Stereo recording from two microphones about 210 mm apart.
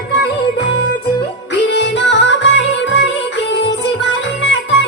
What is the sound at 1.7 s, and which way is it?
Music, 60° left (ahead or behind).